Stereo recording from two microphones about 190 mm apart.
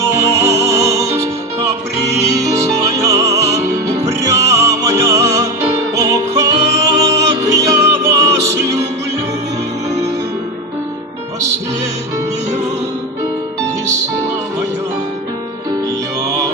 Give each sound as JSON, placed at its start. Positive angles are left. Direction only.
{"t": 0.0, "sound": "music", "side_deg": -15}